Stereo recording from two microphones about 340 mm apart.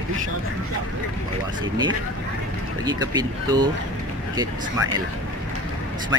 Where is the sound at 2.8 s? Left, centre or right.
Centre.